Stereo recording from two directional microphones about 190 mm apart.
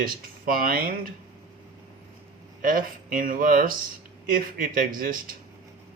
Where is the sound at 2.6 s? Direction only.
45° right (ahead or behind).